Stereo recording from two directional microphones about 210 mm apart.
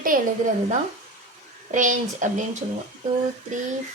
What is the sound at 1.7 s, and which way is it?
Speech, 40° right (ahead or behind).